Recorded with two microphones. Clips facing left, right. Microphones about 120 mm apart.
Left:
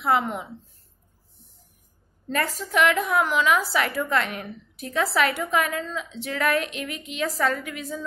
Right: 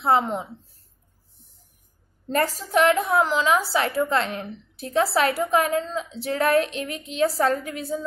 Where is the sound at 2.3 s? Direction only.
35° right (ahead or behind).